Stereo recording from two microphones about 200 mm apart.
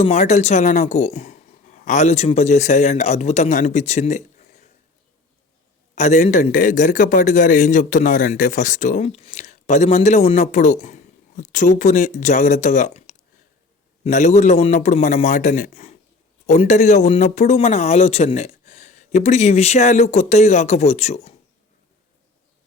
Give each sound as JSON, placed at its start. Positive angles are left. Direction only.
{"t": 0.0, "sound": "a man's voice", "side_deg": 35}
{"t": 5.9, "sound": "a man's voice", "side_deg": 35}